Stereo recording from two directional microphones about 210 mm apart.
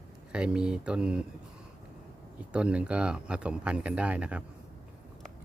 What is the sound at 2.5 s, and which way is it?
Speech, 5° right (ahead or behind).